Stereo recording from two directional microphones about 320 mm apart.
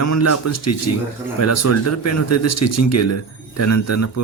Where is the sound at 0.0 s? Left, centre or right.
Left.